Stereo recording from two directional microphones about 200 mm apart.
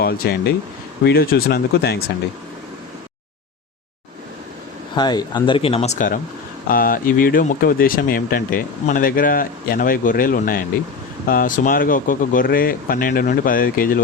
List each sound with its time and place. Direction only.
0.0 s speech: 50° left (ahead or behind)
4.9 s speech: 20° left (ahead or behind); by 14.0 s 45° left (ahead or behind)